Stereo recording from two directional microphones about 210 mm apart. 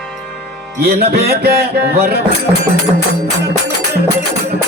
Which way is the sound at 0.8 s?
45° right (ahead or behind).